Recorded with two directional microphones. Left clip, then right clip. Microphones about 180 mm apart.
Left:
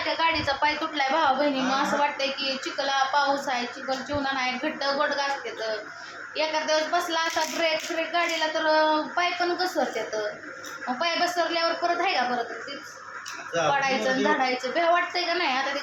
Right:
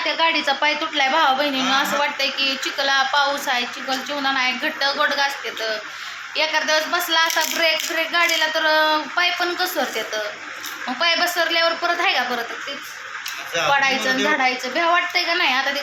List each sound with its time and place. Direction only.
0.2 s a woman's voice: 35° right (ahead or behind)
0.9 s speech: 15° right (ahead or behind)
11.0 s speech: 10° right (ahead or behind)
13.8 s a woman's voice: 25° right (ahead or behind)